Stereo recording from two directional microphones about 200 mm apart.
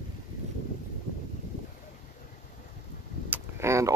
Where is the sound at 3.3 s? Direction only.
15° right (ahead or behind).